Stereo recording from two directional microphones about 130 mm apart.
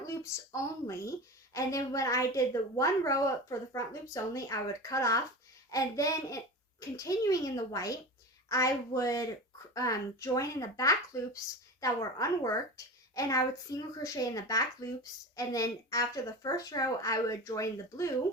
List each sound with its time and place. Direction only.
0.0 s a woman's voice: 25° left (ahead or behind)